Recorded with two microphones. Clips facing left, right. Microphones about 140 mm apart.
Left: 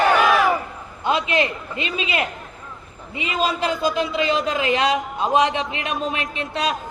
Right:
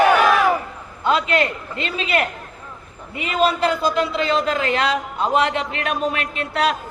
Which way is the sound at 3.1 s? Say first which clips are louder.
Right 4 dB; 20° left (ahead or behind).